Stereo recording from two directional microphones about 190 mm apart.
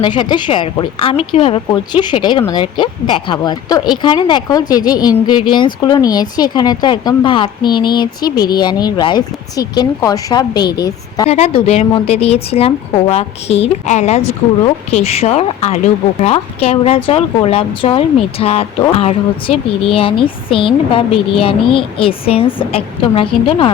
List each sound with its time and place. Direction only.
0.0 s speech: 25° left (ahead or behind)
11.3 s a woman's voice: 35° left (ahead or behind)